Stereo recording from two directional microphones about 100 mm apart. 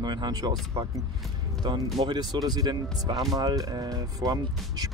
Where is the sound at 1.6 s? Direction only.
50° right (ahead or behind).